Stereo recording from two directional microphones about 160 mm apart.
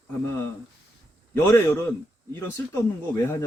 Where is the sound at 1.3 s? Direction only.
15° left (ahead or behind).